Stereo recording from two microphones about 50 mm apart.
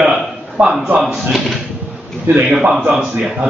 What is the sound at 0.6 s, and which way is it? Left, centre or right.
Speech, right.